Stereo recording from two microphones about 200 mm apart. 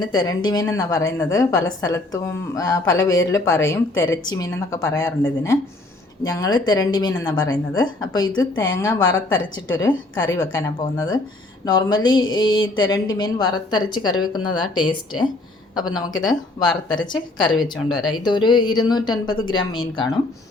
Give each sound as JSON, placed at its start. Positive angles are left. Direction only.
{"t": 0.0, "sound": "a woman's voice", "side_deg": 20}
{"t": 17.6, "sound": "speech", "side_deg": 0}
{"t": 18.2, "sound": "a woman's voice", "side_deg": 20}